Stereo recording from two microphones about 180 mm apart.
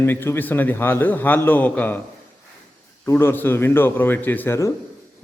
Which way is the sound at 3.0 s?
15° left (ahead or behind).